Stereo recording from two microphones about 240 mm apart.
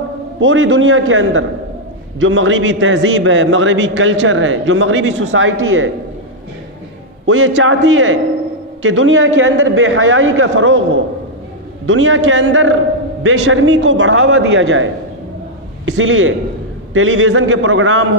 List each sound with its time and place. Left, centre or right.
0.4 s a man's voice: right
7.2 s a man's voice: right
11.8 s a man's voice: right